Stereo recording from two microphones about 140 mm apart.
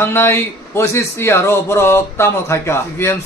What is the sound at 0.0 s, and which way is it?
A man's voice, 15° left (ahead or behind).